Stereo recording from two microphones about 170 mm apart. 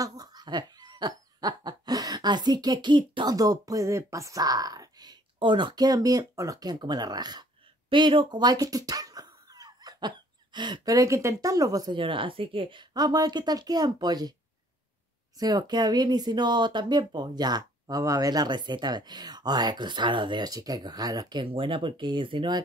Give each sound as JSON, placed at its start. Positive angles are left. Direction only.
{"t": 0.0, "sound": "owl", "side_deg": -20}
{"t": 7.9, "sound": "speech", "side_deg": -30}
{"t": 15.3, "sound": "speech", "side_deg": -25}